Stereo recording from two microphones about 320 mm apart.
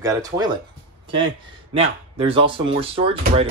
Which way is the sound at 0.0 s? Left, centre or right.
Centre.